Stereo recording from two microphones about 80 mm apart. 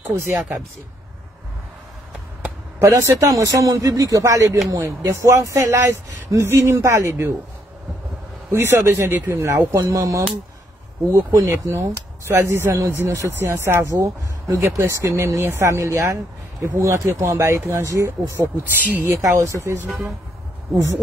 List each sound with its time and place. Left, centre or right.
0.1 s speech: right
2.8 s speech: right
8.5 s speech: right
9.8 s speech: right
11.5 s speech: right
18.8 s speech: right
19.2 s speech: right